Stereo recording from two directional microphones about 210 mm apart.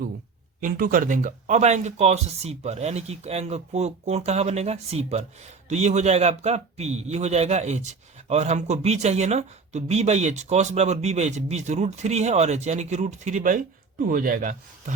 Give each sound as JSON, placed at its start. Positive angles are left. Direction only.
{"t": 0.6, "sound": "speech", "side_deg": -40}